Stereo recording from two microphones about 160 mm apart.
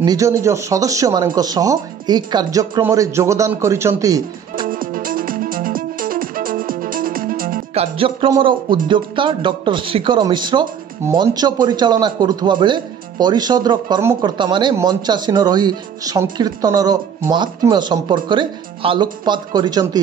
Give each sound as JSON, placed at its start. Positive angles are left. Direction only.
{"t": 0.0, "sound": "a man's voice", "side_deg": -20}
{"t": 4.6, "sound": "music", "side_deg": -60}
{"t": 7.7, "sound": "music", "side_deg": -35}
{"t": 8.4, "sound": "a man's voice", "side_deg": -30}